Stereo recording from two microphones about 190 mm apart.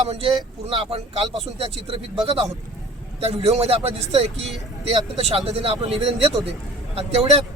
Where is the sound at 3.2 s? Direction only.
35° right (ahead or behind).